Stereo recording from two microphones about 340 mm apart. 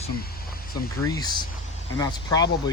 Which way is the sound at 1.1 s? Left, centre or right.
Centre.